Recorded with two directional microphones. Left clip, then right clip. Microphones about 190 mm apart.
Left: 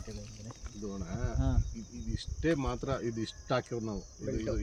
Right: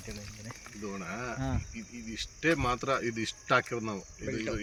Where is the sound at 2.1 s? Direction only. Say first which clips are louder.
Right 3 dB; 15° left (ahead or behind).